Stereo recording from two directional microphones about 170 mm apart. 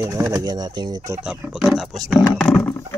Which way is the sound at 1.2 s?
5° right (ahead or behind).